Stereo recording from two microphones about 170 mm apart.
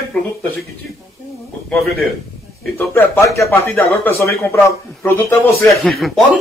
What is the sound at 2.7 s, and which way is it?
Speech, 10° left (ahead or behind).